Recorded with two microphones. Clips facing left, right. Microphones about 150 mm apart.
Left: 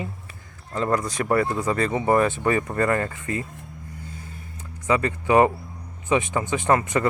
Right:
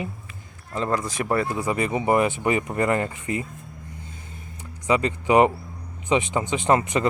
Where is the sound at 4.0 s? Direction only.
20° right (ahead or behind).